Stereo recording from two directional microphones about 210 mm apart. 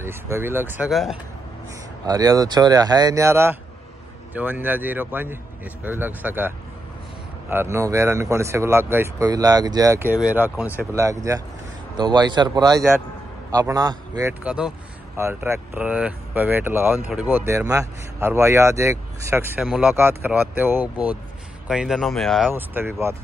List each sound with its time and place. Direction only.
0.0 s speech: 10° right (ahead or behind)
2.0 s a man's voice: 20° right (ahead or behind)
14.4 s speech: 5° right (ahead or behind)
22.5 s speech: 10° right (ahead or behind)